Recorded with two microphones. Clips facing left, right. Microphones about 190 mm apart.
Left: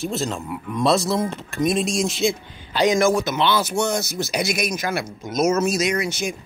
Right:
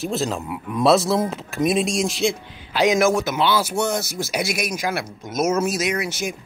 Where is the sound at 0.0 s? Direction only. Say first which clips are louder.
Right 1 dB; centre (ahead or behind).